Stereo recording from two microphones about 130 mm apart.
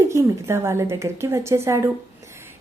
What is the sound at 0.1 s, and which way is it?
A woman's voice, 20° right (ahead or behind).